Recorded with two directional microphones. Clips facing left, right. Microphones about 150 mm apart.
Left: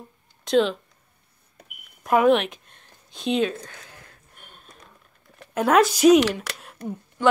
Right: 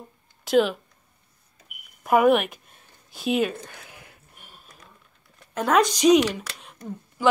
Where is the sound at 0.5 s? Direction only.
5° right (ahead or behind).